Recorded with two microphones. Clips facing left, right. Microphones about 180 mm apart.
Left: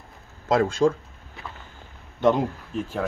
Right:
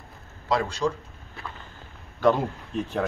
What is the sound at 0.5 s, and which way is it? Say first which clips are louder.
Speech: left 5 dB; 50° left (ahead or behind).